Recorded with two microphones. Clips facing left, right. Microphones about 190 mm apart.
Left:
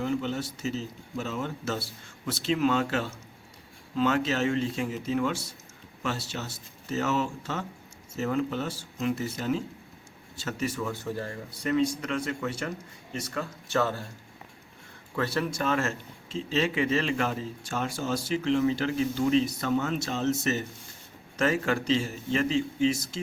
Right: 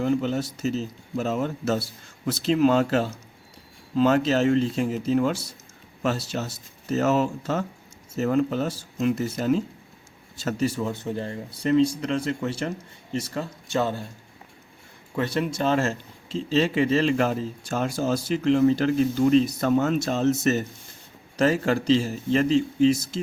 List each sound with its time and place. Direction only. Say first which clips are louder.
0.0 s speech: right 5 dB; 40° right (ahead or behind); by 14.0 s 20° right (ahead or behind)
15.1 s speech: right 3 dB; 20° right (ahead or behind); by 23.2 s 35° right (ahead or behind)